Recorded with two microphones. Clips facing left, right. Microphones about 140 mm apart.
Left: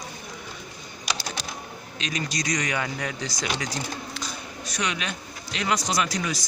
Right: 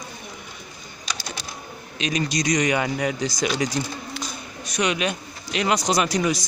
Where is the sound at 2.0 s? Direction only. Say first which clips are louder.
Right 6 dB; 15° right (ahead or behind).